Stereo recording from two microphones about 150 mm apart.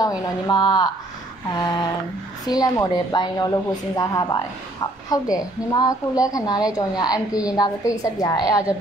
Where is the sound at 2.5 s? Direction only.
25° left (ahead or behind).